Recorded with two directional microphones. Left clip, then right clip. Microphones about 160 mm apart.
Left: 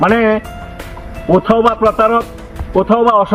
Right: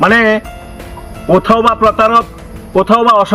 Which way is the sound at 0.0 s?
15° right (ahead or behind).